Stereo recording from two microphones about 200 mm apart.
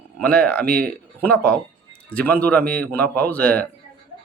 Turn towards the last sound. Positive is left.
turn(degrees=5)  # may be behind; listen again after turning